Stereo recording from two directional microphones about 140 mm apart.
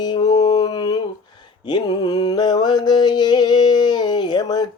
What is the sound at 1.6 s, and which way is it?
Mantra, 30° left (ahead or behind).